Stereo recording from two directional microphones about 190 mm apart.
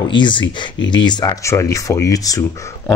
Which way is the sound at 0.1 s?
25° left (ahead or behind).